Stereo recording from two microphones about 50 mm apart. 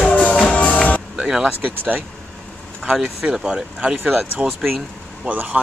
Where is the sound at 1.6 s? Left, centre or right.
Right.